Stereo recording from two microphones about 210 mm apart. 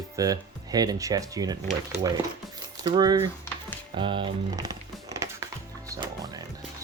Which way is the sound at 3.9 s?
25° right (ahead or behind).